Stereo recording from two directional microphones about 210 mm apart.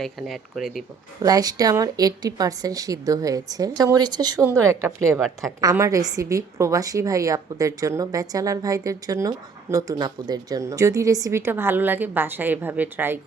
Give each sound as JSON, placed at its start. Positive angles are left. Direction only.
{"t": 0.0, "sound": "speech", "side_deg": 0}
{"t": 1.2, "sound": "a woman's voice", "side_deg": -15}